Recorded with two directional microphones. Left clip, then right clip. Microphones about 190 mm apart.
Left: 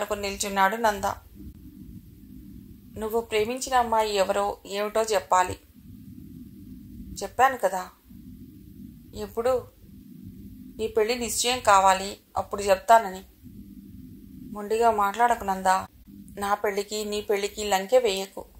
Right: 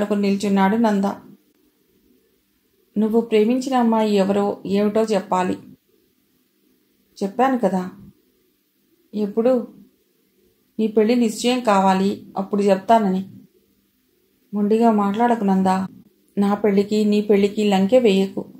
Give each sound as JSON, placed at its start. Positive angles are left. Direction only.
{"t": 0.0, "sound": "speech", "side_deg": 35}
{"t": 2.9, "sound": "speech", "side_deg": 35}
{"t": 7.2, "sound": "speech", "side_deg": 35}
{"t": 9.1, "sound": "speech", "side_deg": 35}
{"t": 10.8, "sound": "speech", "side_deg": 35}
{"t": 14.5, "sound": "speech", "side_deg": 35}